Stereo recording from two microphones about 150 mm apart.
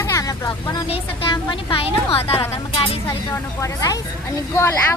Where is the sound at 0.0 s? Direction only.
20° left (ahead or behind).